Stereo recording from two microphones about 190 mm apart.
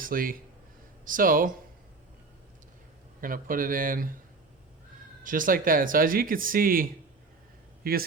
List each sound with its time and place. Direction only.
0.0 s speech: 50° right (ahead or behind)
3.2 s speech: 45° right (ahead or behind)
5.2 s speech: 45° right (ahead or behind)
7.8 s speech: 50° right (ahead or behind)